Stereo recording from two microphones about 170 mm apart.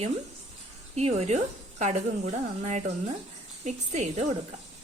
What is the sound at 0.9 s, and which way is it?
A woman's voice, 40° right (ahead or behind).